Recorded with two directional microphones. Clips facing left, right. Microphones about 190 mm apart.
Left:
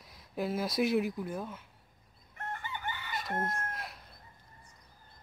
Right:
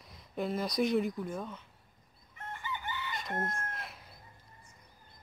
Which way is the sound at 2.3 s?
50° left (ahead or behind).